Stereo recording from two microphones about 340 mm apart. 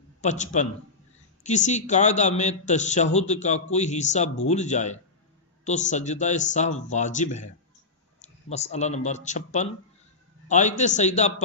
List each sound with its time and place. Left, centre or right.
0.2 s a man's voice: left